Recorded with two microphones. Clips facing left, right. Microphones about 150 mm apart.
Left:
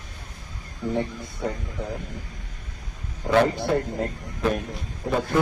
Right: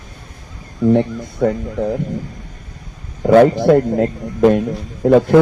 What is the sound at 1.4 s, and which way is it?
Speech, 90° right.